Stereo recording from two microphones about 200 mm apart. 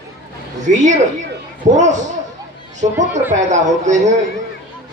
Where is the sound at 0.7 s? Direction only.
35° right (ahead or behind).